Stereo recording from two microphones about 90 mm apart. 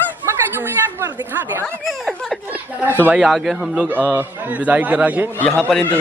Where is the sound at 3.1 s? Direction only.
5° right (ahead or behind).